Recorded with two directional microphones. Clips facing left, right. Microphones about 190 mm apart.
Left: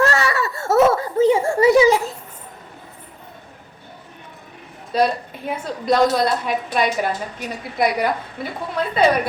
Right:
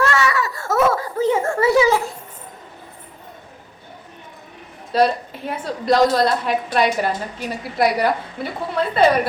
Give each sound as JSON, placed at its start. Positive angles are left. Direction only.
{"t": 0.0, "sound": "giggle", "side_deg": 35}
{"t": 1.4, "sound": "a sound", "side_deg": 10}
{"t": 4.9, "sound": "a woman's voice", "side_deg": 0}